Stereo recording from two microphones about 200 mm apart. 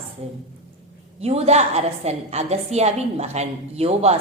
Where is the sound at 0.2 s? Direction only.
35° right (ahead or behind).